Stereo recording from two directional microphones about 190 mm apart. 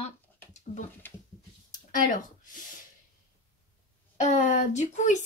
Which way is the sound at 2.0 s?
45° left (ahead or behind).